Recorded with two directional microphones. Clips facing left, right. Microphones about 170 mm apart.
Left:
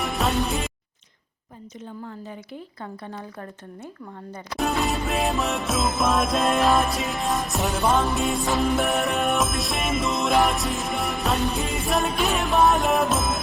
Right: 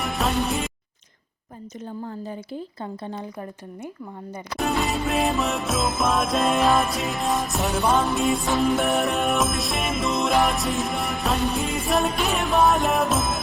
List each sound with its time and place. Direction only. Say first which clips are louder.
0.0 s music: even; centre (ahead or behind)
2.0 s speech: right 5 dB; 35° right (ahead or behind)
4.5 s music: even; centre (ahead or behind)